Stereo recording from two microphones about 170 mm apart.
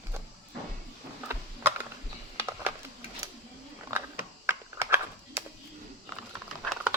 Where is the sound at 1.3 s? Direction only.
10° right (ahead or behind).